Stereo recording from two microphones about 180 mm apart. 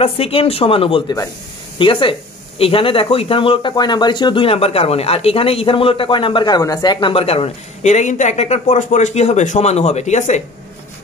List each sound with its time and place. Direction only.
0.0 s speech: 30° left (ahead or behind)